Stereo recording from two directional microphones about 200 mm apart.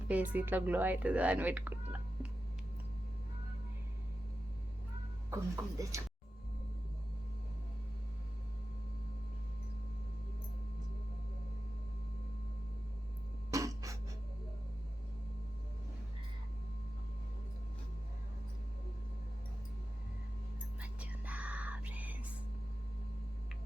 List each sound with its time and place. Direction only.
0.1 s speech: 10° right (ahead or behind)
5.3 s speech: 15° right (ahead or behind)
13.5 s a sound: 15° right (ahead or behind)
20.8 s whispering: 5° right (ahead or behind)